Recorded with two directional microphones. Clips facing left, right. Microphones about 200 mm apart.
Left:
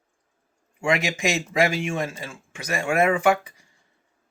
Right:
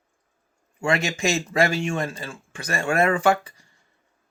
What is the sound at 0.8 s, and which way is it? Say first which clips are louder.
Speech: even; 15° left (ahead or behind).